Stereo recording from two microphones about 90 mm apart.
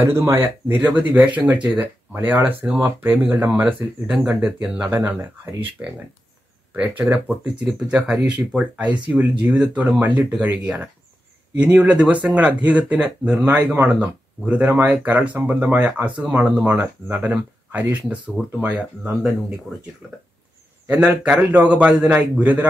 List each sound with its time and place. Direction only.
0.0 s speech: 30° right (ahead or behind)
4.3 s a man's voice: 5° right (ahead or behind)
4.9 s speech: 25° right (ahead or behind)
7.2 s a man's voice: 15° right (ahead or behind)
17.6 s a man's voice: 20° right (ahead or behind); by 19.3 s 5° right (ahead or behind)
20.8 s a man's voice: 20° right (ahead or behind)